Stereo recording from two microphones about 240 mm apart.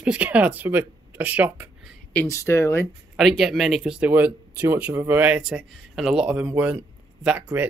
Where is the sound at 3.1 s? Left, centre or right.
Centre.